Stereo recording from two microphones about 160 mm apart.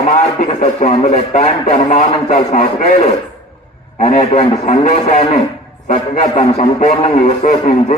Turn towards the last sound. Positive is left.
turn(degrees=45)  # may be behind; listen again after turning